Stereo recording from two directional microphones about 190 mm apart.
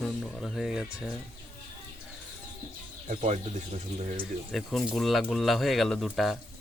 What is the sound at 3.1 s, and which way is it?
Speech, 40° right (ahead or behind).